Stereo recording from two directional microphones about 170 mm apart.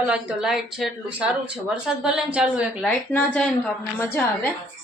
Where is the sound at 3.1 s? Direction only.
10° left (ahead or behind).